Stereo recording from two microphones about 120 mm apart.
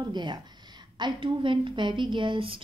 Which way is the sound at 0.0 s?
40° right (ahead or behind).